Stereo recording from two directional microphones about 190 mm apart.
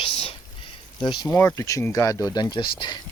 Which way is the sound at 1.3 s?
15° left (ahead or behind).